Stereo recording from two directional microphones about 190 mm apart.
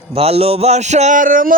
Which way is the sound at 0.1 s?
30° right (ahead or behind).